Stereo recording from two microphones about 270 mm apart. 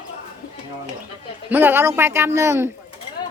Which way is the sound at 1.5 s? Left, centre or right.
Centre.